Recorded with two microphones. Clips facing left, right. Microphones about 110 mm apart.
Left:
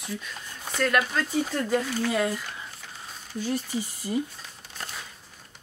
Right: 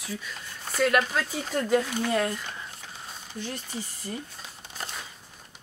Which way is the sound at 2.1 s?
Centre (ahead or behind).